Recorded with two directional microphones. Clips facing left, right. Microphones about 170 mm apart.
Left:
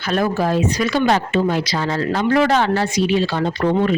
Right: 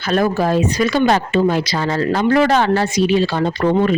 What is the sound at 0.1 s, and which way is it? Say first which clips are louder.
Speech: right 2 dB; 40° right (ahead or behind).